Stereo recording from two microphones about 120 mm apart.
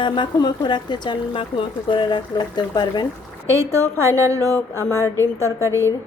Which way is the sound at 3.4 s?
25° right (ahead or behind).